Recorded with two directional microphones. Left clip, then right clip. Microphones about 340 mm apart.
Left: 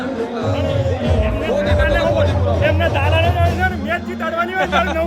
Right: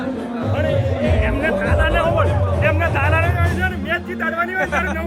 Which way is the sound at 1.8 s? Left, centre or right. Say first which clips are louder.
Right 1 dB; left.